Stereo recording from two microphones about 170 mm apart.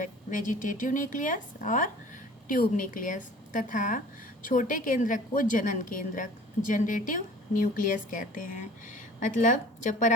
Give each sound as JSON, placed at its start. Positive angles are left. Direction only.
{"t": 0.0, "sound": "a woman's voice", "side_deg": 50}